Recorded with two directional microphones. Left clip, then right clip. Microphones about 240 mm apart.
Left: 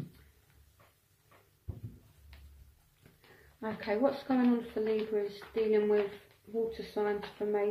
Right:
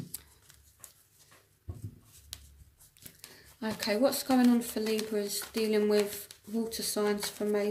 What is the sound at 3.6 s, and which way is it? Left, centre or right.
Speech, right.